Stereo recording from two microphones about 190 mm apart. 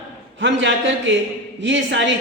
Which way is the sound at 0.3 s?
75° right (ahead or behind).